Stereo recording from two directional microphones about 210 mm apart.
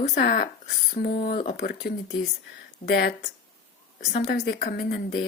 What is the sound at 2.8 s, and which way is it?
Speech, 35° left (ahead or behind).